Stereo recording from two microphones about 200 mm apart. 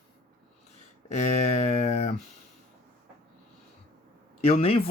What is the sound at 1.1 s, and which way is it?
Speech, 35° left (ahead or behind).